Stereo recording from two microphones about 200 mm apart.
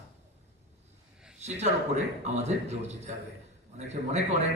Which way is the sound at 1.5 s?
35° right (ahead or behind).